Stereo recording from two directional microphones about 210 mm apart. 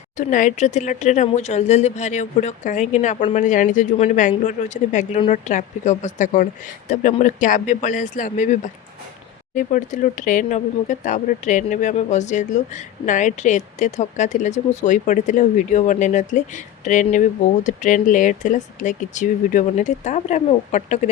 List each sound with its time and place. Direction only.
0.2 s speech: 35° left (ahead or behind)